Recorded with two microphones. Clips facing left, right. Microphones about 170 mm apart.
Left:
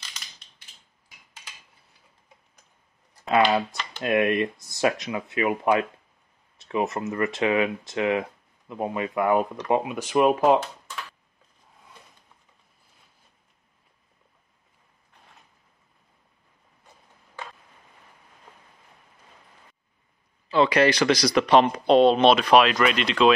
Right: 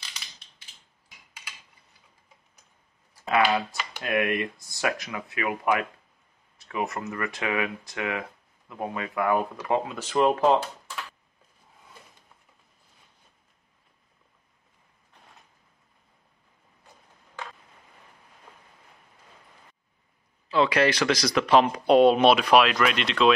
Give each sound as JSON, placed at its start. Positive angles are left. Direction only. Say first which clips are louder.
{"t": 4.0, "sound": "speech", "louder": "left 4 dB", "side_deg": 25}
{"t": 20.4, "sound": "speech", "louder": "left 2 dB", "side_deg": 0}